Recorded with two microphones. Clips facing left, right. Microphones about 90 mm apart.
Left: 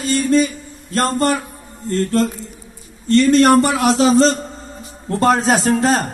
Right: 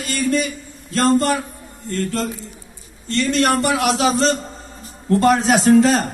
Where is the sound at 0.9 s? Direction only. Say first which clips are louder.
Right 1 dB; 40° left (ahead or behind).